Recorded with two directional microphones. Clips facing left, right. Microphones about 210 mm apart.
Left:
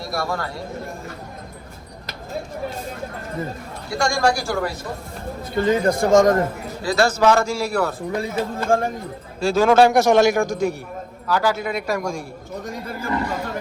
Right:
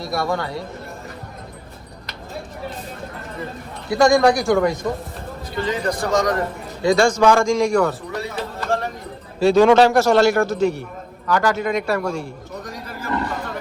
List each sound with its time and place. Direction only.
0.0 s a man's voice: centre (ahead or behind)
3.8 s a man's voice: centre (ahead or behind)
5.5 s speech: 50° left (ahead or behind)
6.8 s a man's voice: 5° left (ahead or behind)
8.1 s speech: 50° left (ahead or behind)
9.4 s a man's voice: centre (ahead or behind)